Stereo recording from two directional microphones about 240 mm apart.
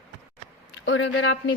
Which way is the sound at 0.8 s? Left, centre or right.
Left.